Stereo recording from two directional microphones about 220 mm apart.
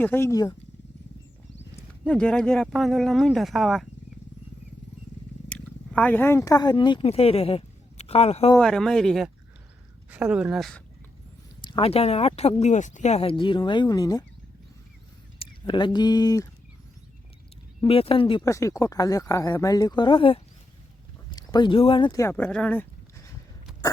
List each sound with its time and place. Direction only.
0.0 s speech: 10° left (ahead or behind)
2.0 s speech: 5° left (ahead or behind)
5.5 s speech: 5° left (ahead or behind); by 8.5 s 25° left (ahead or behind)
8.5 s speech: centre (ahead or behind)
11.6 s speech: 25° left (ahead or behind)
15.4 s speech: 20° left (ahead or behind)
17.8 s speech: 25° left (ahead or behind); by 23.3 s 10° left (ahead or behind)